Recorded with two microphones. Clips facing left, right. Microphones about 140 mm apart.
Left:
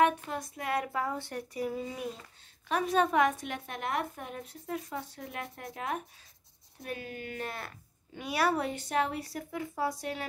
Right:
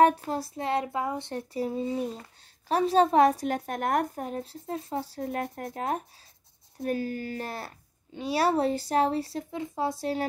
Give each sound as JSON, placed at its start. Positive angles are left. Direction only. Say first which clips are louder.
{"t": 0.2, "sound": "speech", "louder": "right 6 dB", "side_deg": -35}